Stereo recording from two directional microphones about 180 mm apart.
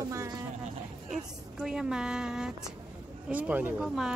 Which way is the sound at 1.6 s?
5° right (ahead or behind).